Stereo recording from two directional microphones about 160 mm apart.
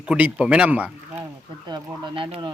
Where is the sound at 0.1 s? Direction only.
5° right (ahead or behind).